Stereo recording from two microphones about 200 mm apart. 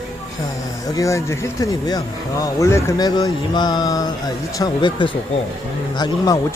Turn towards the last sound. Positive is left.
turn(degrees=20)  # may be behind; listen again after turning